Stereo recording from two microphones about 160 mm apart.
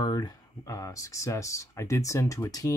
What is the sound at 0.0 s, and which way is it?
Speech, 25° left (ahead or behind).